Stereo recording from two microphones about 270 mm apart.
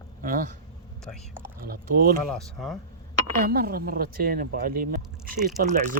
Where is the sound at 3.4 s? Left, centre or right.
Right.